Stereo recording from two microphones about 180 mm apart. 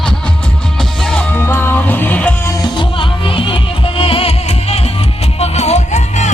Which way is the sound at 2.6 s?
25° left (ahead or behind).